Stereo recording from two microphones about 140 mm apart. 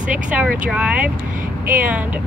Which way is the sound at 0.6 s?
10° right (ahead or behind).